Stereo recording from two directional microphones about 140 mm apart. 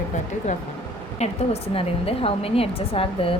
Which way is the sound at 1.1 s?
50° left (ahead or behind).